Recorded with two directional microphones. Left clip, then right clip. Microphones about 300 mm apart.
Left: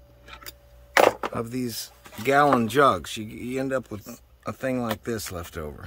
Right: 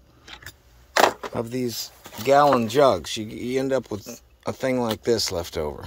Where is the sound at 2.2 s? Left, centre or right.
Left.